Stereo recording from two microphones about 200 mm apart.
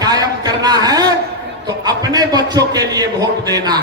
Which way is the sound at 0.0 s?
20° right (ahead or behind).